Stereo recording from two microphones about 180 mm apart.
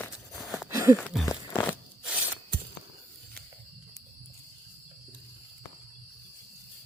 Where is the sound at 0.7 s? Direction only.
15° right (ahead or behind).